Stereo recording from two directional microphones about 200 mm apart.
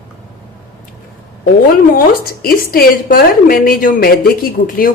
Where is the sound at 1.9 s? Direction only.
45° left (ahead or behind).